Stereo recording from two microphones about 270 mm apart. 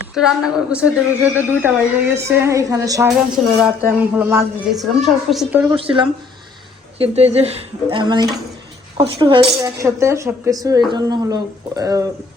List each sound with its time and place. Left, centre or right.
0.1 s a woman's voice: centre
5.7 s a woman's voice: centre